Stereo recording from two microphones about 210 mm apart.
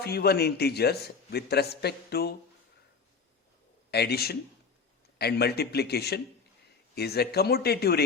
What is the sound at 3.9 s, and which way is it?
Speech, 50° left (ahead or behind).